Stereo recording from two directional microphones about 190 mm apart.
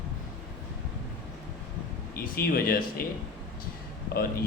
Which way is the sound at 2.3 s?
50° left (ahead or behind).